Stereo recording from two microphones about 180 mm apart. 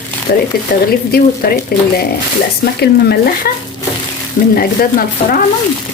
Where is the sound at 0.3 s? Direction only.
55° left (ahead or behind).